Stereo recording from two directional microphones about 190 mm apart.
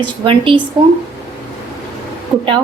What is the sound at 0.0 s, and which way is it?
Speech, 25° right (ahead or behind).